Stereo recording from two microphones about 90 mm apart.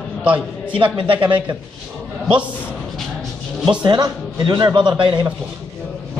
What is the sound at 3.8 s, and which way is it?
A man's voice, 55° right (ahead or behind).